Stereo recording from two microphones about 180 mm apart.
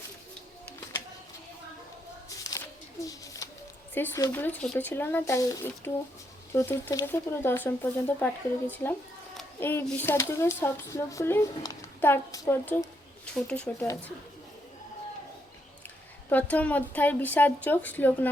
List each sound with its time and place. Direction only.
2.4 s a sound: 20° left (ahead or behind)
3.9 s speech: 15° left (ahead or behind)
13.8 s speech: 20° left (ahead or behind)
16.3 s speech: 10° left (ahead or behind)